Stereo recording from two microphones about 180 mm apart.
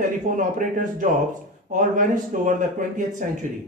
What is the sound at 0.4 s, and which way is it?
Speech, 45° right (ahead or behind).